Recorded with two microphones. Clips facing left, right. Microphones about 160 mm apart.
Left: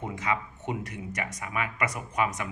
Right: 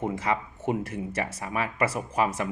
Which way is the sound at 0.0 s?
30° right (ahead or behind).